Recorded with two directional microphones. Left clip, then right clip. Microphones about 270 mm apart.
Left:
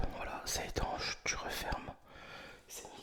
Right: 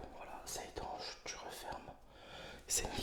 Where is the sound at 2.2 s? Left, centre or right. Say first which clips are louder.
Even; centre.